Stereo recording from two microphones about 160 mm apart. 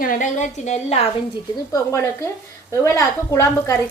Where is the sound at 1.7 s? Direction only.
20° left (ahead or behind).